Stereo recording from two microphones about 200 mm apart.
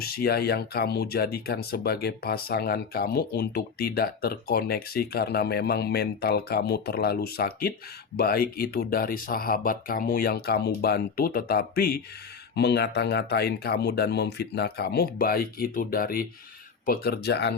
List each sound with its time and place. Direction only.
0.0 s speech: 50° left (ahead or behind)